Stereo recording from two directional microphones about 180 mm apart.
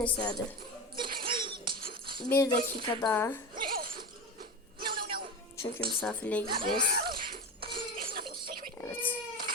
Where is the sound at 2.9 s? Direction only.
20° left (ahead or behind).